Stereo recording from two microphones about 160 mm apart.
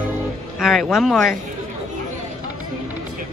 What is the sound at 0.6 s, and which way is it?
Speech, centre (ahead or behind).